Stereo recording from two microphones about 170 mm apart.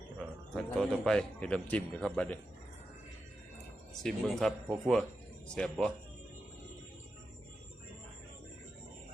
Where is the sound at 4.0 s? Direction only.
5° left (ahead or behind).